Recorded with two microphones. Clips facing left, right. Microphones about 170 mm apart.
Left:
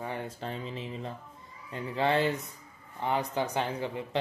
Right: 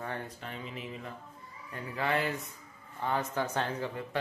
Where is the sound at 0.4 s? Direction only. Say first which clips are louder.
Left 4 dB; 30° left (ahead or behind).